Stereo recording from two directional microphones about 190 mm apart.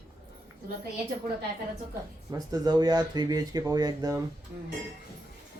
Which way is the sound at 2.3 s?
20° right (ahead or behind).